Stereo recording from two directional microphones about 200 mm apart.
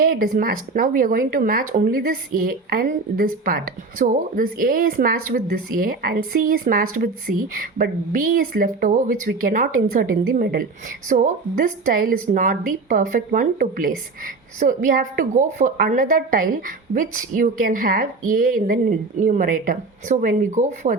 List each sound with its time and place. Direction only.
0.0 s a woman's voice: 45° right (ahead or behind)